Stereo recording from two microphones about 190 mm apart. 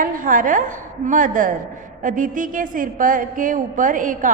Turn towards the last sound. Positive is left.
turn(degrees=-45)  # may be behind; listen again after turning